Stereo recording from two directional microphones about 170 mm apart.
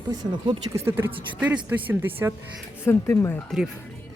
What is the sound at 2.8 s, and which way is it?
Speech, 15° left (ahead or behind).